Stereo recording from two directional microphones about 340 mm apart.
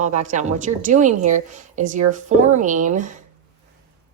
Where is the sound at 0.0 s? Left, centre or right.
Right.